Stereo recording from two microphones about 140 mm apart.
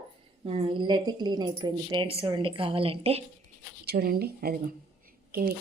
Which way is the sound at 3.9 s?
90° right.